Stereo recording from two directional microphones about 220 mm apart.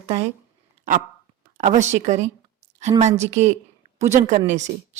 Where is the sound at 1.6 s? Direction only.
35° right (ahead or behind).